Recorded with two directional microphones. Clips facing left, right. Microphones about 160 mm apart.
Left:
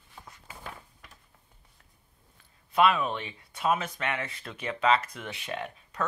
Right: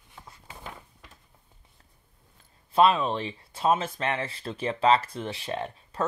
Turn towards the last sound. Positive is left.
turn(degrees=-30)  # may be behind; listen again after turning